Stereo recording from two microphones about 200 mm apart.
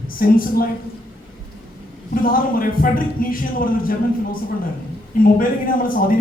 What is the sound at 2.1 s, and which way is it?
A man's voice, 45° left (ahead or behind).